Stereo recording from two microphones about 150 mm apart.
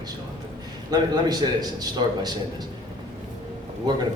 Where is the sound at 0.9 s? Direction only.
25° right (ahead or behind).